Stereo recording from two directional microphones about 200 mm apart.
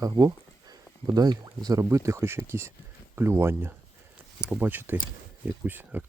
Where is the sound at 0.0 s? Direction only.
20° right (ahead or behind).